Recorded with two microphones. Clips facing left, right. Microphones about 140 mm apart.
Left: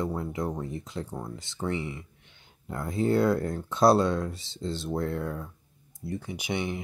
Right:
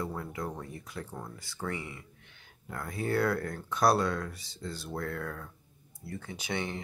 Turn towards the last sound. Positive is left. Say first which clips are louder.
# left 4 dB
turn(degrees=15)  # may be behind; listen again after turning